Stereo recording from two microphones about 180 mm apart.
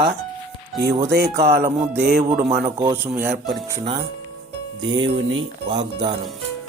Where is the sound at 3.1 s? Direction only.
55° right (ahead or behind).